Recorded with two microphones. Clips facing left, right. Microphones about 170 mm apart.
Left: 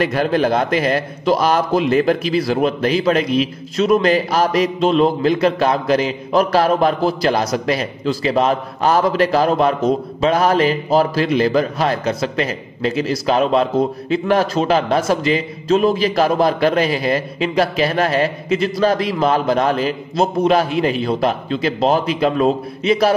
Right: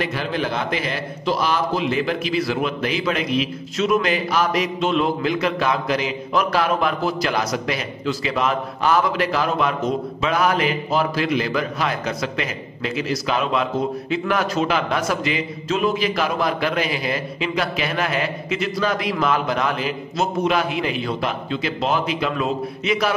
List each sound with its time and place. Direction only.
0.0 s a man's voice: 50° left (ahead or behind)